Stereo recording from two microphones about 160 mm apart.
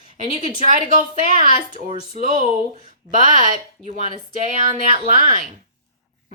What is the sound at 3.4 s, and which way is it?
Speech, 50° right (ahead or behind).